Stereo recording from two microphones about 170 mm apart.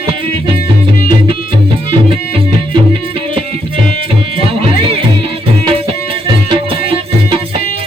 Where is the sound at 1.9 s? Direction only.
35° right (ahead or behind).